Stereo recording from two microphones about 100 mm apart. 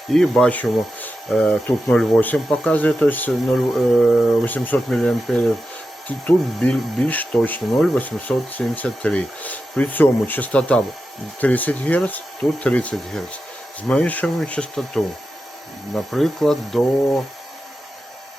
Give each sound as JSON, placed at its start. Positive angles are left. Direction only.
{"t": 0.1, "sound": "speech", "side_deg": 5}
{"t": 3.5, "sound": "speech", "side_deg": 0}
{"t": 4.4, "sound": "speech", "side_deg": 20}
{"t": 4.9, "sound": "speech", "side_deg": 5}